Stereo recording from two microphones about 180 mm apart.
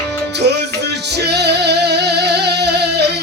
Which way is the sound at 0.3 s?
70° right (ahead or behind).